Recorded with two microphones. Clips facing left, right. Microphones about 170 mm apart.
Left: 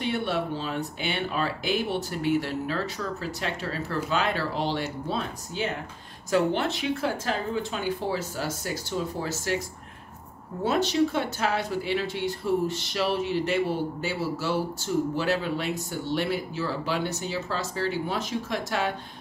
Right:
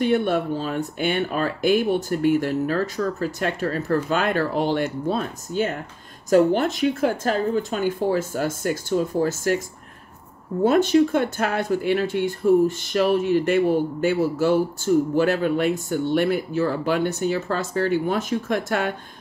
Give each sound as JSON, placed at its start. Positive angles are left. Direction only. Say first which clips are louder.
{"t": 0.0, "sound": "speech", "louder": "right 7 dB", "side_deg": -50}
{"t": 10.6, "sound": "speech", "louder": "right 7 dB", "side_deg": -50}